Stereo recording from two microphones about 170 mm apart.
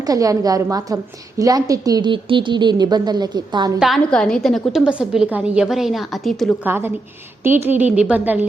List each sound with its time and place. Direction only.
0.0 s a woman's voice: 20° right (ahead or behind)
3.8 s a woman's voice: centre (ahead or behind)
6.7 s a woman's voice: 15° right (ahead or behind)